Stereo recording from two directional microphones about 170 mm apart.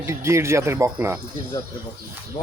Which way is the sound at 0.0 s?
15° right (ahead or behind).